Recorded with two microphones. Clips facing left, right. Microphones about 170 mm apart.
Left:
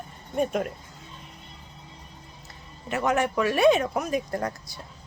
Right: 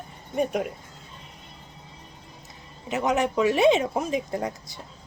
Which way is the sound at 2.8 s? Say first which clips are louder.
Right 1 dB; 20° right (ahead or behind).